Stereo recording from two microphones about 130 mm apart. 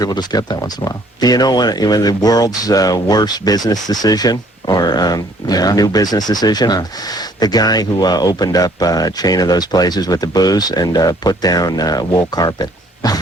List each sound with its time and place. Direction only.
0.0 s speech: 30° left (ahead or behind)